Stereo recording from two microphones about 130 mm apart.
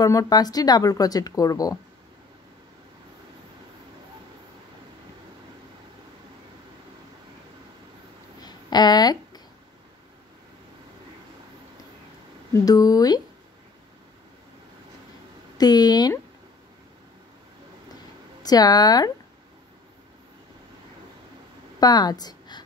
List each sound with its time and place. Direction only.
0.0 s speech: 25° left (ahead or behind)
8.4 s a sound: 30° left (ahead or behind)
12.5 s speech: 30° left (ahead or behind)
15.5 s speech: 30° left (ahead or behind)
18.4 s speech: 30° left (ahead or behind)
21.7 s a woman's voice: 30° left (ahead or behind)